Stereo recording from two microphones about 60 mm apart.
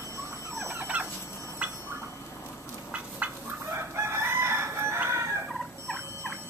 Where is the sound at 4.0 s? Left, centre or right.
Right.